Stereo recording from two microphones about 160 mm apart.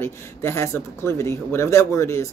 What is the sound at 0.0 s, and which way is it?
Speech, 15° left (ahead or behind).